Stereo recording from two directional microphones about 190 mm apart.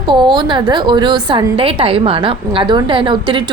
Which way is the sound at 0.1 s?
25° right (ahead or behind).